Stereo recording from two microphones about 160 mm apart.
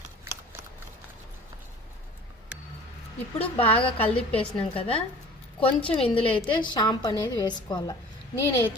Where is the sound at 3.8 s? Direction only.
35° left (ahead or behind).